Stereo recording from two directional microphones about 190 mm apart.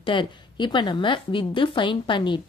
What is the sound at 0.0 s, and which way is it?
A woman's voice, 25° left (ahead or behind).